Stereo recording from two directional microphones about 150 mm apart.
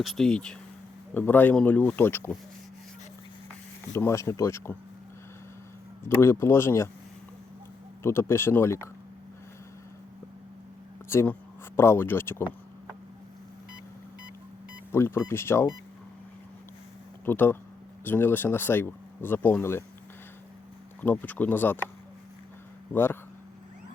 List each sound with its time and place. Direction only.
0.0 s speech: centre (ahead or behind)
3.9 s speech: 20° left (ahead or behind)
6.1 s speech: 15° left (ahead or behind)
8.0 s speech: 15° left (ahead or behind)
11.1 s speech: 15° left (ahead or behind)
14.9 s speech: 15° left (ahead or behind)
17.2 s speech: 15° left (ahead or behind)
21.0 s speech: 10° left (ahead or behind)
22.9 s speech: 15° left (ahead or behind)